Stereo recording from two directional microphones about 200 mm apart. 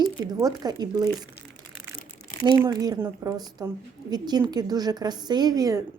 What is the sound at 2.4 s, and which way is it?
A woman's voice, 15° right (ahead or behind).